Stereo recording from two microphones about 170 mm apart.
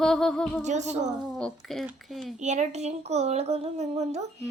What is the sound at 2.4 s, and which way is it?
Speech, 45° right (ahead or behind).